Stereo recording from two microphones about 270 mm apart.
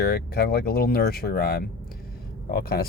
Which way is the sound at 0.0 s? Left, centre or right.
Left.